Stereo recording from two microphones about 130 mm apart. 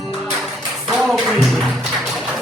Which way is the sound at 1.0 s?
Centre (ahead or behind).